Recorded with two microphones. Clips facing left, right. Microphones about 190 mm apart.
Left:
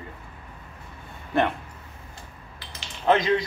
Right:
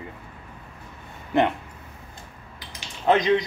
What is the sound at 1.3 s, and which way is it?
Speech, 20° right (ahead or behind).